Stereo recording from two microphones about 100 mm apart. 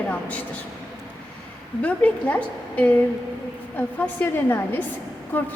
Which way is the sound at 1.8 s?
15° left (ahead or behind).